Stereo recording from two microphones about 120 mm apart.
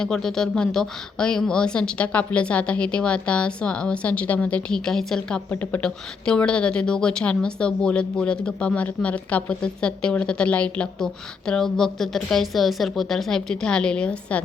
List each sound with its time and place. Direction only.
0.0 s speech: 5° left (ahead or behind)
5.5 s speech: 15° left (ahead or behind)